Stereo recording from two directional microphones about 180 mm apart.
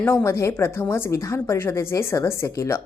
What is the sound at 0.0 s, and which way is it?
Speech, 10° left (ahead or behind).